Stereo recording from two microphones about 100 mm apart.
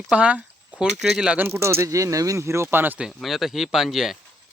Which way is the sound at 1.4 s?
25° right (ahead or behind).